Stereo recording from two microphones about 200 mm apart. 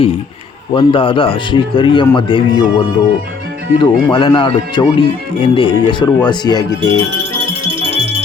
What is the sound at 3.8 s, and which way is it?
Speech, 25° left (ahead or behind).